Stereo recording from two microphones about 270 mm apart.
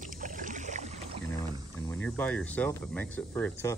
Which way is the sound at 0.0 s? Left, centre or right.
Right.